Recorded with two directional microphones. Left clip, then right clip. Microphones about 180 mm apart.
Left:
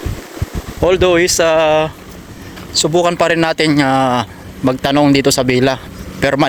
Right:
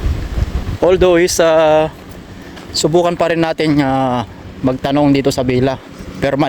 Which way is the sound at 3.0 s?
5° right (ahead or behind).